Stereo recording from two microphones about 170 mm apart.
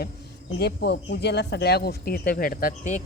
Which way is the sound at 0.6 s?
75° left (ahead or behind).